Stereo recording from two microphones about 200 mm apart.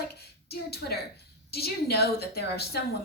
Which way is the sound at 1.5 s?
55° left (ahead or behind).